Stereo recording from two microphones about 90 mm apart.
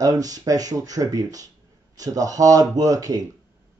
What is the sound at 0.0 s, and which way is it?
Speech, 40° right (ahead or behind).